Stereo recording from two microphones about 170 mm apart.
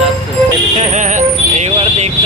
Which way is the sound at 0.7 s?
45° right (ahead or behind).